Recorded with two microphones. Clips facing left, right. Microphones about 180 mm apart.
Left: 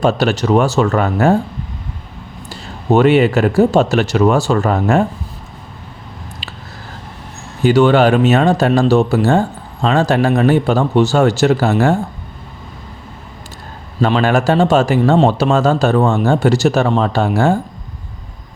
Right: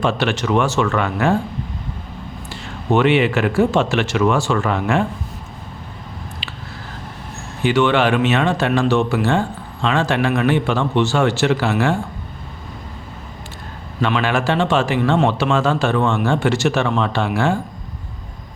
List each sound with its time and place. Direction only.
0.0 s speech: 40° left (ahead or behind)
2.5 s speech: 40° left (ahead or behind)
6.4 s a sound: 40° left (ahead or behind)
7.6 s speech: 40° left (ahead or behind)
14.0 s speech: 40° left (ahead or behind)